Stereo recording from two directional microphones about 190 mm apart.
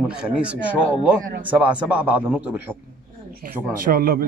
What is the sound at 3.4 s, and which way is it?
Speech, 50° right (ahead or behind).